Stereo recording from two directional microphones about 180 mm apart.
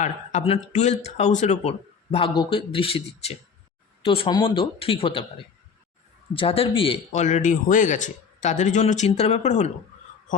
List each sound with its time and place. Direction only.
0.0 s speech: 40° left (ahead or behind)
6.3 s speech: 30° left (ahead or behind)